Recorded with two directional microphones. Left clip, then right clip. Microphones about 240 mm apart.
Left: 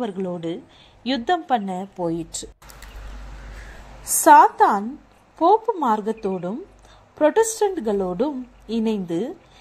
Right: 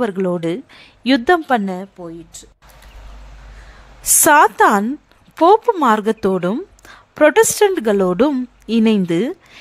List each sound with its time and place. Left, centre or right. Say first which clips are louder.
0.0 s speech: right 8 dB; right
0.4 s speech: right 7 dB; right
1.2 s a woman's voice: right 4 dB; right
2.0 s speech: left 7 dB; centre
4.2 s speech: right 1 dB; right